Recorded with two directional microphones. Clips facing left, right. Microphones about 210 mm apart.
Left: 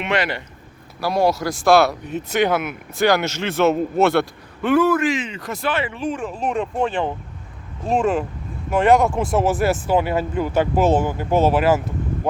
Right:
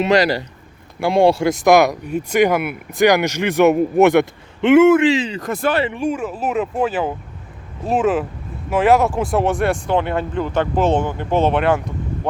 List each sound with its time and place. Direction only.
0.0 s speech: 40° right (ahead or behind)
0.9 s speech: 25° right (ahead or behind)
1.6 s speech: 15° right (ahead or behind)
5.4 s speech: 50° right (ahead or behind)
5.9 s speech: 10° right (ahead or behind)